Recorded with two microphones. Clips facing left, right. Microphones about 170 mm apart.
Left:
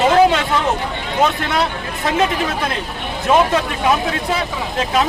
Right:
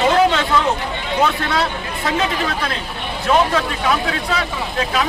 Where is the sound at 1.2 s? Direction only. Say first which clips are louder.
Left 1 dB; 20° left (ahead or behind).